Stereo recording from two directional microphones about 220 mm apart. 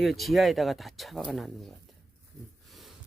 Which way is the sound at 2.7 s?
Centre (ahead or behind).